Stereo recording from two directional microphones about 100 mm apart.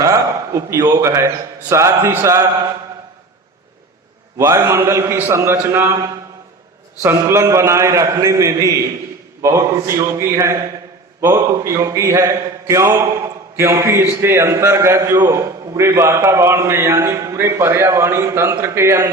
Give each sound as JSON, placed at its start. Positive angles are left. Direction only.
{"t": 0.0, "sound": "a man's voice", "side_deg": -30}
{"t": 4.4, "sound": "speech", "side_deg": -30}